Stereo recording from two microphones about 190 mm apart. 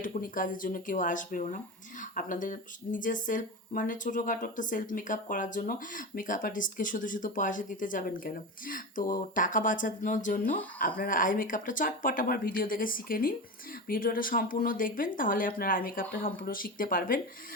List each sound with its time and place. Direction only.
0.0 s speech: 45° left (ahead or behind)